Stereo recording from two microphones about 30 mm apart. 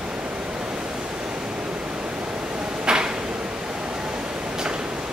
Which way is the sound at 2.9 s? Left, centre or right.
Right.